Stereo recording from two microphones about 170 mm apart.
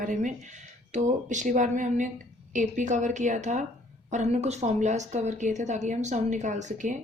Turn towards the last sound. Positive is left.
turn(degrees=-45)  # may be behind; listen again after turning